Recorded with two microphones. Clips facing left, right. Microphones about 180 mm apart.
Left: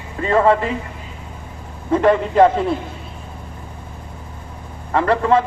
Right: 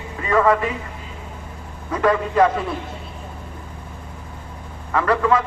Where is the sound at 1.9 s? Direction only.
25° left (ahead or behind).